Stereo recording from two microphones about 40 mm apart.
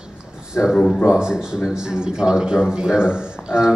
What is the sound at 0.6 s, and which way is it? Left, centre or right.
Speech, left.